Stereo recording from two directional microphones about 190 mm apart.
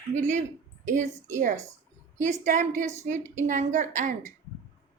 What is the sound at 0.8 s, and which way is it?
A woman's voice, 40° right (ahead or behind).